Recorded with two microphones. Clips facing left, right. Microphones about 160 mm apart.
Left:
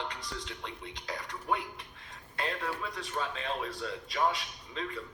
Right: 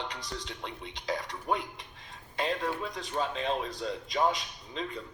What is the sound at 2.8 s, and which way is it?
Speech, 35° right (ahead or behind).